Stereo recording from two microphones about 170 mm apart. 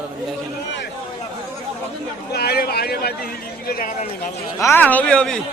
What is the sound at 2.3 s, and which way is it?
A man's voice, 65° left (ahead or behind).